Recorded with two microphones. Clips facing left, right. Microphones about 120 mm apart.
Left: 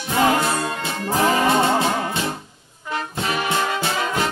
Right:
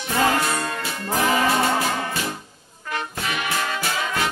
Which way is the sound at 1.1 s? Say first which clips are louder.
Left 2 dB; 25° left (ahead or behind).